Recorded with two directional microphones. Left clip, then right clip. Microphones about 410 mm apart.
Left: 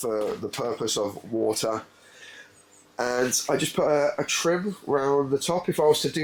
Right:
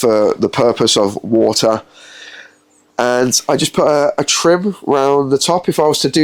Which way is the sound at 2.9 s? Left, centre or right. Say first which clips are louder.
Right 12 dB; right.